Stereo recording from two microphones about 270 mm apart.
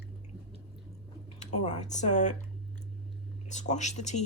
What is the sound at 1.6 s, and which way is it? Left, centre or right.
Speech, left.